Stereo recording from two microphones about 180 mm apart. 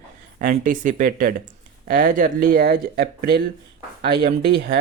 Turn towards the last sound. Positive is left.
turn(degrees=-60)  # may be behind; listen again after turning